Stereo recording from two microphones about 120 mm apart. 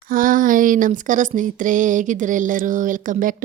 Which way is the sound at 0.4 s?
90° right.